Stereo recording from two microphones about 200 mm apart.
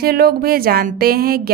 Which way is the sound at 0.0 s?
50° right (ahead or behind).